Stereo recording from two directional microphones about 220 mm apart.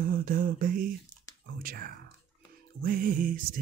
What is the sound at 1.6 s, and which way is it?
Speech, 40° right (ahead or behind).